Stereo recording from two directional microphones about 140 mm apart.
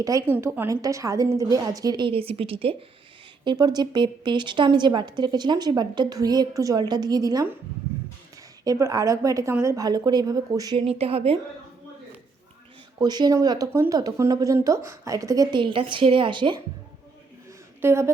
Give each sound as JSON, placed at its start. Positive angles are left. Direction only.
{"t": 0.0, "sound": "a woman's voice", "side_deg": -25}
{"t": 0.3, "sound": "a woman's voice", "side_deg": -15}
{"t": 0.7, "sound": "a woman's voice", "side_deg": -25}
{"t": 3.4, "sound": "a woman's voice", "side_deg": -30}
{"t": 8.6, "sound": "a woman's voice", "side_deg": -25}
{"t": 10.8, "sound": "speech", "side_deg": -45}
{"t": 13.0, "sound": "a woman's voice", "side_deg": -30}
{"t": 17.7, "sound": "speech", "side_deg": -20}